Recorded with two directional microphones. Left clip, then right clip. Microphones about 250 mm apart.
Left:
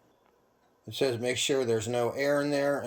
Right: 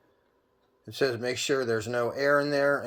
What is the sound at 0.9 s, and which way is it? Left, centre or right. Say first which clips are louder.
Speech: right 1 dB; centre.